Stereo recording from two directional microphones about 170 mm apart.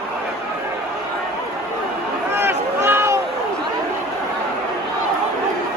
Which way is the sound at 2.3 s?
15° right (ahead or behind).